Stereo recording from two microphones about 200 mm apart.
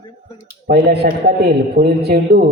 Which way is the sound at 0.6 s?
50° right (ahead or behind).